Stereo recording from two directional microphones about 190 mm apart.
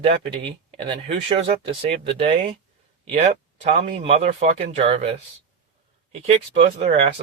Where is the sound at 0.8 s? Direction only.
30° right (ahead or behind).